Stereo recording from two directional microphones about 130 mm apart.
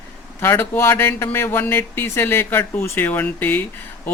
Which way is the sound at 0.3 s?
15° left (ahead or behind).